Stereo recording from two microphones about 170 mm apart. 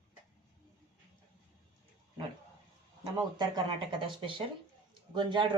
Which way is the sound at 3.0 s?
25° right (ahead or behind).